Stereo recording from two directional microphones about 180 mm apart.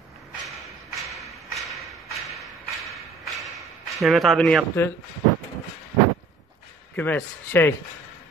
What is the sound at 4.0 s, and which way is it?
Speech, centre (ahead or behind).